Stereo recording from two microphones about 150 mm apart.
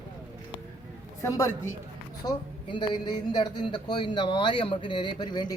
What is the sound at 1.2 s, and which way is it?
Speech, 20° left (ahead or behind).